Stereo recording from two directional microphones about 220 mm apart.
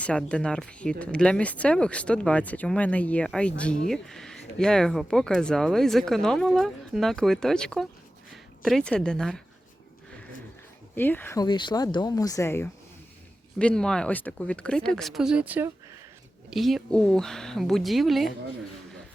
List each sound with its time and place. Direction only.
0.0 s speech: 5° left (ahead or behind)
10.9 s speech: 10° left (ahead or behind)